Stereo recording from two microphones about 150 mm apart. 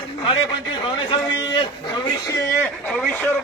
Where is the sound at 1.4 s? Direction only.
25° left (ahead or behind).